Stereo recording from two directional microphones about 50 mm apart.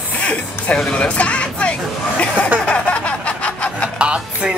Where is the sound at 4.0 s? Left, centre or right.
Right.